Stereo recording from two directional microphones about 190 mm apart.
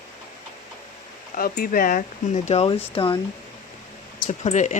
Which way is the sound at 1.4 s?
50° left (ahead or behind).